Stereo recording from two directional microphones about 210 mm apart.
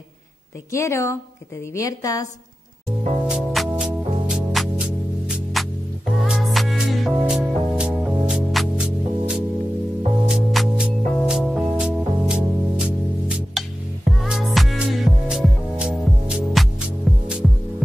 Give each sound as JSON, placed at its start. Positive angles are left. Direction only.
{"t": 0.7, "sound": "a woman's voice", "side_deg": 15}
{"t": 3.3, "sound": "music", "side_deg": -5}